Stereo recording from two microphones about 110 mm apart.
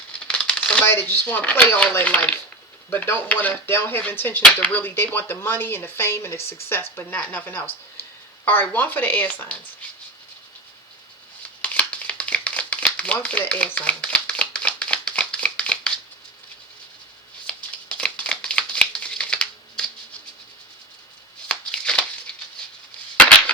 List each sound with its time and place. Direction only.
0.3 s speech: 10° left (ahead or behind)
11.6 s crumpling: 10° left (ahead or behind)
17.4 s shuffling cards: 10° left (ahead or behind)
21.4 s a sound: 10° left (ahead or behind)
22.3 s patter: 5° left (ahead or behind)